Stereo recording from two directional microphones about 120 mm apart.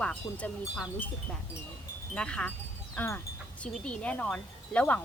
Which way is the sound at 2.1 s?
10° left (ahead or behind).